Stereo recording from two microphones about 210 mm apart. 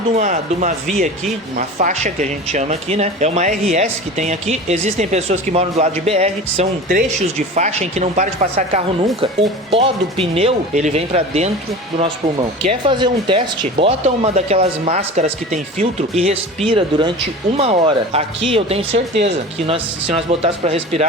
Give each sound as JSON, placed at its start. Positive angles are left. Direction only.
{"t": 0.2, "sound": "speech", "side_deg": -35}
{"t": 12.6, "sound": "speech", "side_deg": -20}